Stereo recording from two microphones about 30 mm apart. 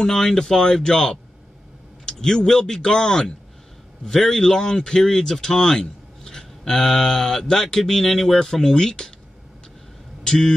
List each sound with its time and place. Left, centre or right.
0.0 s a man's voice: centre
10.2 s speech: left